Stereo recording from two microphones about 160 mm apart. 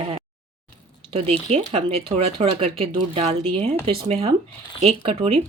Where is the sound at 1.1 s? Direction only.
40° right (ahead or behind).